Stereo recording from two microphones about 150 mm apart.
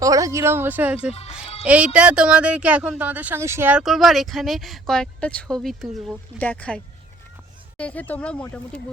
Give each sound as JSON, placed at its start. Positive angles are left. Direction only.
{"t": 0.0, "sound": "speech", "side_deg": -20}